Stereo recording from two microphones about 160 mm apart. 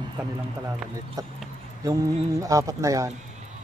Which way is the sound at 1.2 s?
20° right (ahead or behind).